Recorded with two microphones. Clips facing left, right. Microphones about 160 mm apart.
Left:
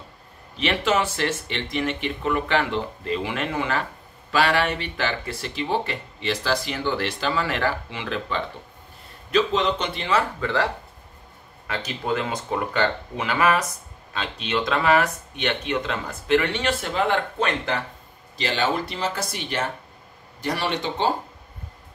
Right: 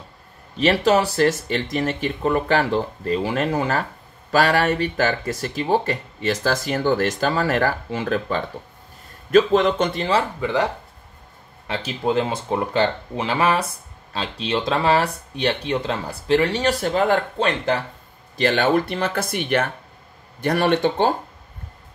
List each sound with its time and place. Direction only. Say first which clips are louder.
0.6 s speech: right 5 dB; 40° right (ahead or behind)
10.4 s speech: right 3 dB; 15° right (ahead or behind)
11.6 s speech: right 5 dB; 30° right (ahead or behind)
18.4 s speech: right 6 dB; 55° right (ahead or behind)